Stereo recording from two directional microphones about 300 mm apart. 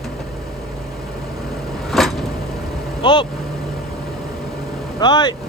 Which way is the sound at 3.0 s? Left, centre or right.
Centre.